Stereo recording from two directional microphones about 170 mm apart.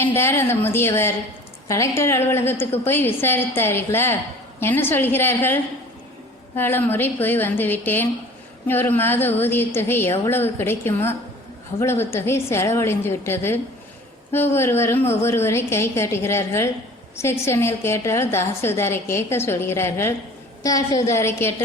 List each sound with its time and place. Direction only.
0.0 s a woman's voice: 15° left (ahead or behind)
6.6 s a woman's voice: 10° left (ahead or behind)